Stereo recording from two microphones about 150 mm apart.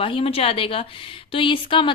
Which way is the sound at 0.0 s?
40° left (ahead or behind).